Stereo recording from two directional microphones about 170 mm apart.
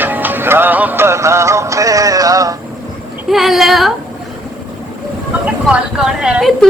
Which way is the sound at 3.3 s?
Centre (ahead or behind).